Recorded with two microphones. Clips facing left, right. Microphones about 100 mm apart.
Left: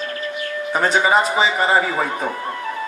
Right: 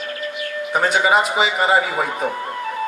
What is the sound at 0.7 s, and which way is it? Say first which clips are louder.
A man's voice: even; 35° left (ahead or behind).